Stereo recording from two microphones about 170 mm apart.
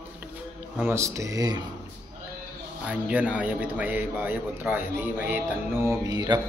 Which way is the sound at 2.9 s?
10° right (ahead or behind).